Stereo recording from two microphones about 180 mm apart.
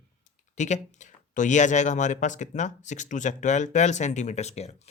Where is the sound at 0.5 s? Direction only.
40° left (ahead or behind).